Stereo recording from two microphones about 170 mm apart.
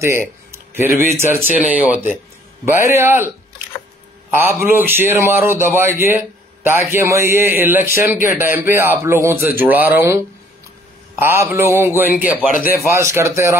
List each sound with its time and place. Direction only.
0.5 s a sound: 15° right (ahead or behind)
1.2 s a man's voice: 15° right (ahead or behind)
4.3 s a man's voice: 15° right (ahead or behind)
12.4 s speech: 55° left (ahead or behind)
12.9 s a man's voice: 15° right (ahead or behind)